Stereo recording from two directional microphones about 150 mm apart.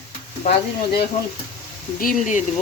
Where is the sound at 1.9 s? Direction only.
60° left (ahead or behind).